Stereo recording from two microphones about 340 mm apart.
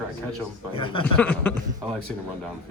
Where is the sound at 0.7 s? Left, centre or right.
Centre.